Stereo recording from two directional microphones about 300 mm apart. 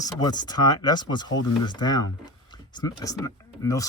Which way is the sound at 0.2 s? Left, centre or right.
Centre.